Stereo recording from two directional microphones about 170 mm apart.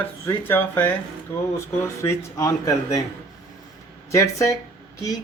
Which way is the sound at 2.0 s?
20° left (ahead or behind).